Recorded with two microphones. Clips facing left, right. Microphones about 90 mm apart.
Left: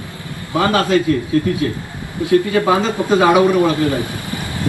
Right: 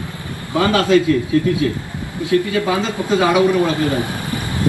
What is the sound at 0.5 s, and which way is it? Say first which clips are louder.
A man's voice: right 1 dB; 35° left (ahead or behind).